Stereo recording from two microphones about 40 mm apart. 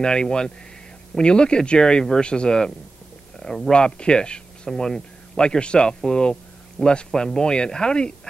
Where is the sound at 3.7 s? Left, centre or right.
Left.